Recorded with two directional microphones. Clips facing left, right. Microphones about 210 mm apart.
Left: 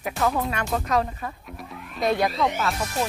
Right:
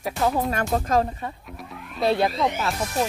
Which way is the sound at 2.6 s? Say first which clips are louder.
Right 1 dB; 25° right (ahead or behind).